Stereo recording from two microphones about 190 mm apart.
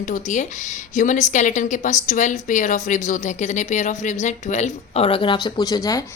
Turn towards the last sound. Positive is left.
turn(degrees=20)  # may be behind; listen again after turning